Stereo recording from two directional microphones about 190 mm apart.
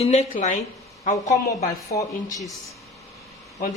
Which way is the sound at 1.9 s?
15° left (ahead or behind).